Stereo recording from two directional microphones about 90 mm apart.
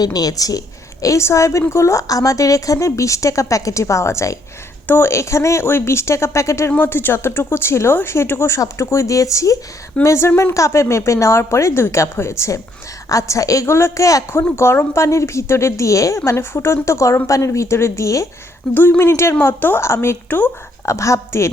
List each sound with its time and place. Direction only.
0.0 s a woman's voice: 45° left (ahead or behind)
18.7 s speech: 20° left (ahead or behind)